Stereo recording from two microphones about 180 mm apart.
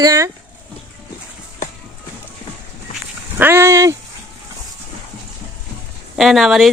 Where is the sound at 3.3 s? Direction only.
10° right (ahead or behind).